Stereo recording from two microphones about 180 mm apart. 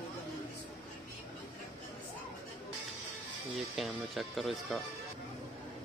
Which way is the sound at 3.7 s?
Centre (ahead or behind).